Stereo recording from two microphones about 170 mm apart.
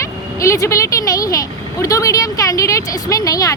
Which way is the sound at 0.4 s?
20° left (ahead or behind).